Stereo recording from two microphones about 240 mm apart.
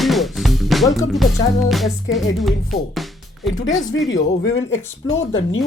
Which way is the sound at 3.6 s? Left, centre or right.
Left.